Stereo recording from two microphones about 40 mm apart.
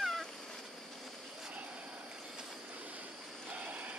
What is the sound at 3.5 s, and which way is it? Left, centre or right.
Vehicle, right.